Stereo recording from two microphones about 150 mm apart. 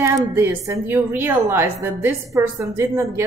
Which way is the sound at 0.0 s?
15° right (ahead or behind).